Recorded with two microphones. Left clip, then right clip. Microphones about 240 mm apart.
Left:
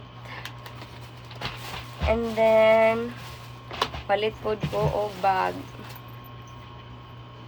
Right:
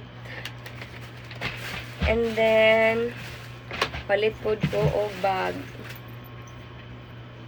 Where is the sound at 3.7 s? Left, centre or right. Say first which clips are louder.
Even; centre.